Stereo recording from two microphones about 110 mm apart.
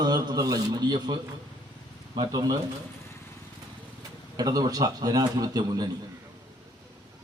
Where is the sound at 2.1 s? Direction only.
40° right (ahead or behind).